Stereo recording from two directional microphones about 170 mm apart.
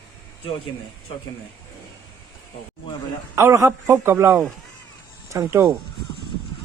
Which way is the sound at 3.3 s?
15° right (ahead or behind).